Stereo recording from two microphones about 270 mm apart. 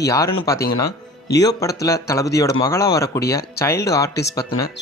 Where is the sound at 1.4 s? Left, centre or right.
Centre.